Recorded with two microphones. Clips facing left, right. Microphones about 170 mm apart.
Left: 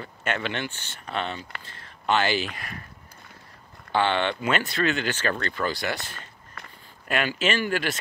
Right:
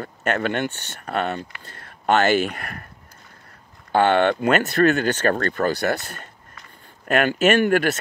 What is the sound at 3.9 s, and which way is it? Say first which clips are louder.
Speech: right 7 dB; 50° right (ahead or behind).